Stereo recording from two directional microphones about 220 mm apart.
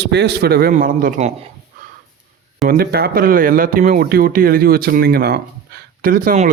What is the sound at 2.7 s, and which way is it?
Speech, 45° right (ahead or behind).